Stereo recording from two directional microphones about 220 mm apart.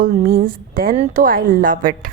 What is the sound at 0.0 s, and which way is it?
A woman's voice, 40° right (ahead or behind).